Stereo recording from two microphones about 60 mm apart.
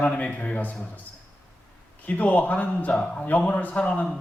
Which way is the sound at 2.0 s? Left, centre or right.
Left.